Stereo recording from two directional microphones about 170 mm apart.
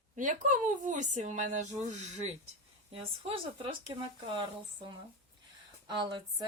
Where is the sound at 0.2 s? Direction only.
50° right (ahead or behind); by 3.9 s 30° right (ahead or behind).